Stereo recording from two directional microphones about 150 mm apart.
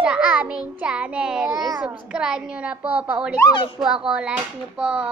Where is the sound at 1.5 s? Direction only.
25° right (ahead or behind).